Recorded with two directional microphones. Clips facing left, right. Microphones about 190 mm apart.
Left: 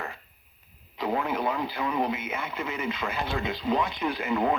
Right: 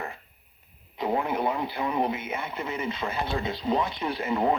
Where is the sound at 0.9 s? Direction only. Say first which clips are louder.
Right 1 dB; 25° right (ahead or behind).